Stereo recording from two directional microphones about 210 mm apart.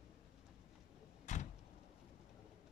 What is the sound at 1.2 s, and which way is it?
Vehicle, 35° left (ahead or behind).